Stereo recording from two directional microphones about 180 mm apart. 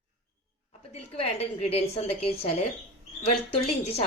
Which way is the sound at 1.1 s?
35° left (ahead or behind).